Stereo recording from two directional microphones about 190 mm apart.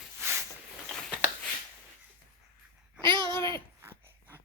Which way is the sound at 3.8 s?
10° right (ahead or behind).